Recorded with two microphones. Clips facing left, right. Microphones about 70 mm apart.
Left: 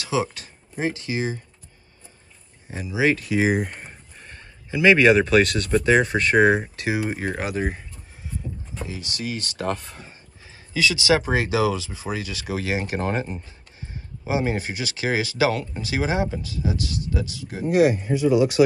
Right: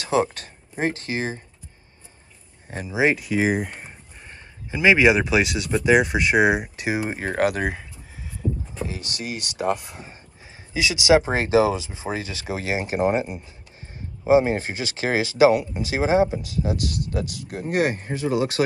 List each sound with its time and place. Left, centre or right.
0.0 s speech: right
2.9 s speech: right
3.2 s speech: centre
4.3 s a sound: centre
4.9 s speech: centre
6.9 s speech: right
7.3 s speech: right
9.1 s speech: right
9.4 s speech: centre
13.7 s speech: right
16.6 s speech: right